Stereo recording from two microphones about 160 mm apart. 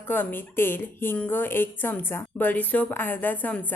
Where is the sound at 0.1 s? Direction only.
10° left (ahead or behind).